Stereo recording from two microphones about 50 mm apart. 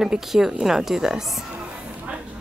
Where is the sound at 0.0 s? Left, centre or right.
Centre.